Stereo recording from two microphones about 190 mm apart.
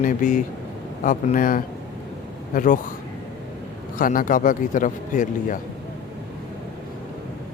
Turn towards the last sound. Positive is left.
turn(degrees=40)  # may be behind; listen again after turning